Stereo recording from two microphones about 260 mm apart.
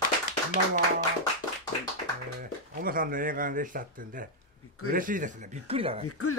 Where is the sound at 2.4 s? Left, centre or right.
Right.